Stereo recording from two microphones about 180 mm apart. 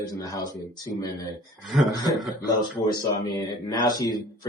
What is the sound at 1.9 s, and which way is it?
Speech, 20° left (ahead or behind).